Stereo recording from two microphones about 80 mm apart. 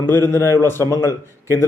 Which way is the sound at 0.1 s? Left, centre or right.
Left.